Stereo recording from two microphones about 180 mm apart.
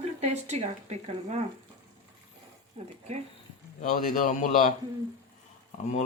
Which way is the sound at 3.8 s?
50° left (ahead or behind).